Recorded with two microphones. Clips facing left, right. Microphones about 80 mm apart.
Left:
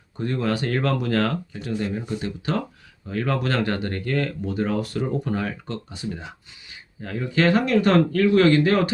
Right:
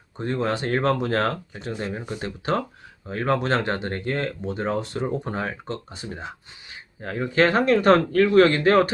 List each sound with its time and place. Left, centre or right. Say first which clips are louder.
0.2 s speech: even; right